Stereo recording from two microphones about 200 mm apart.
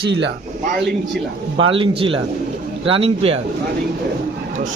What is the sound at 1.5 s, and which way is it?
A man's voice, 25° right (ahead or behind).